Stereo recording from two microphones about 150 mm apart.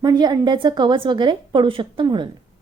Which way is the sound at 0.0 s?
25° right (ahead or behind).